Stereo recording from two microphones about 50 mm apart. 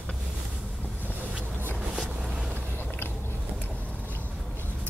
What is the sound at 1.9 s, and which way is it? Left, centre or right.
Vehicle, centre.